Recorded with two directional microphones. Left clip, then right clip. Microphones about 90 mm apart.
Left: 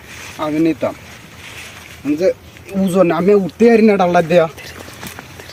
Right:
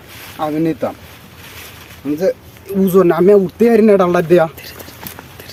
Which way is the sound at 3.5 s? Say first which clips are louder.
Right 1 dB; 50° right (ahead or behind).